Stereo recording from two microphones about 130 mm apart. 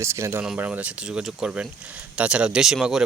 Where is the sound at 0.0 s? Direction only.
20° right (ahead or behind).